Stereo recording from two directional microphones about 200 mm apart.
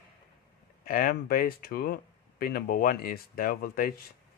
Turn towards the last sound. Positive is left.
turn(degrees=45)  # may be behind; listen again after turning